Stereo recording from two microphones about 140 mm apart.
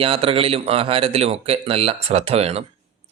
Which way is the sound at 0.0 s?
40° right (ahead or behind).